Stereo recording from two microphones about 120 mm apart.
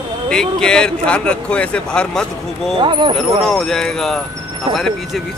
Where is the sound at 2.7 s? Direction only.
45° right (ahead or behind).